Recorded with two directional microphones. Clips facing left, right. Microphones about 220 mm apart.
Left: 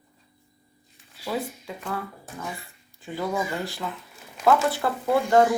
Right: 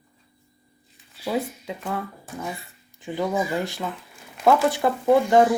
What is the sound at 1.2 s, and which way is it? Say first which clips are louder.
Speech: right 3 dB; 20° right (ahead or behind).